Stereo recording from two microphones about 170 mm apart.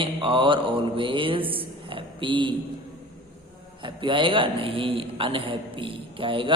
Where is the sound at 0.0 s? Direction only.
30° right (ahead or behind).